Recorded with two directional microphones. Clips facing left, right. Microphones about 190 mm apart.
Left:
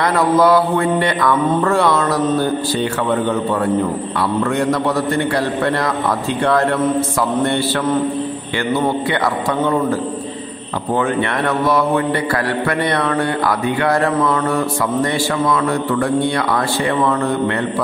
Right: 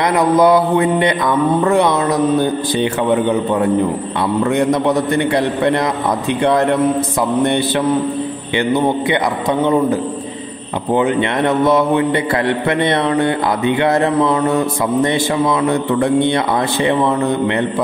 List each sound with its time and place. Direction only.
0.0 s mantra: 20° right (ahead or behind)
4.4 s a man's voice: 20° right (ahead or behind)
6.4 s mantra: 20° right (ahead or behind)
8.5 s a man's voice: 20° right (ahead or behind)
11.0 s a man's voice: 20° right (ahead or behind)